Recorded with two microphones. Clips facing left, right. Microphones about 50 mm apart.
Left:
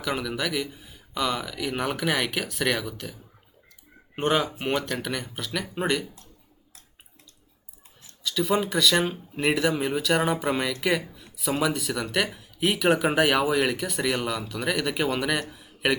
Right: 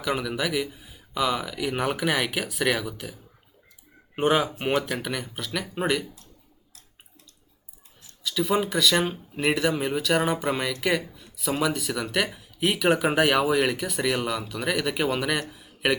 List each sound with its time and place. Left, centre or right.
0.0 s speech: centre
8.2 s speech: centre